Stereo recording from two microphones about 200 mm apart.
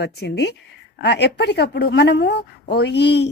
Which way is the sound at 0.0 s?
55° left (ahead or behind).